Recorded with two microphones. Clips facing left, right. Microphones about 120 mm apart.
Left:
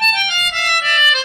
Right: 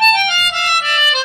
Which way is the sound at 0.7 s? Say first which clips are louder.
Right 1 dB; 35° right (ahead or behind).